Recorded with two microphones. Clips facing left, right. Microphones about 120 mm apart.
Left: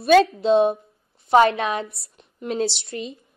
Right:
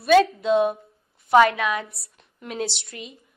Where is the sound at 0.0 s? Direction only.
30° left (ahead or behind).